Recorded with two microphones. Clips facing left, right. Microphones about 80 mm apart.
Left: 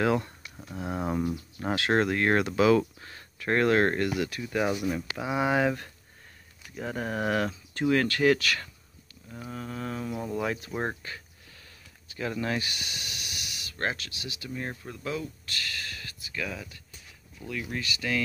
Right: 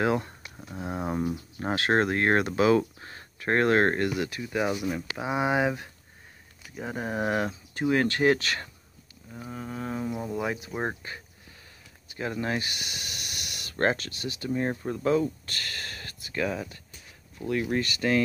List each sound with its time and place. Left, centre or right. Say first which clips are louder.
0.0 s speech: even; right
4.4 s speech: even; centre
5.1 s speech: right 1 dB; right
9.3 s speech: right 1 dB; centre
11.0 s speech: right 1 dB; right
13.4 s a sound: right 1 dB; right
13.7 s speech: right 6 dB; right
14.5 s speech: right 9 dB; right